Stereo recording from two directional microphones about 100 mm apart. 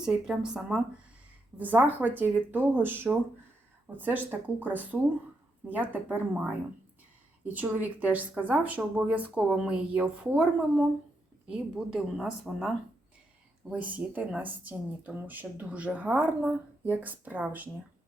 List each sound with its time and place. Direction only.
0.0 s speech: 5° right (ahead or behind)
1.5 s speech: 15° right (ahead or behind)